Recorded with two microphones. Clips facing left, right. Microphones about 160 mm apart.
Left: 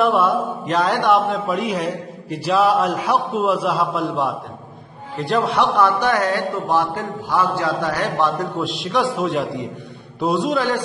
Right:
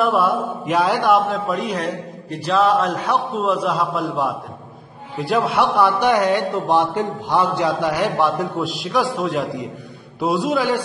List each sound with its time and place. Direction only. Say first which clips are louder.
0.0 s a man's voice: left 1 dB; centre (ahead or behind)
8.5 s a man's voice: even; centre (ahead or behind)